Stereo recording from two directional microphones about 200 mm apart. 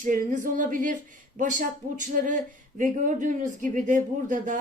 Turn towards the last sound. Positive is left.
turn(degrees=-40)  # may be behind; listen again after turning